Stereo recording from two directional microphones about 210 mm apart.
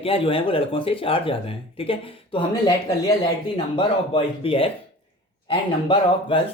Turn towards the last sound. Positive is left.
turn(degrees=25)  # may be behind; listen again after turning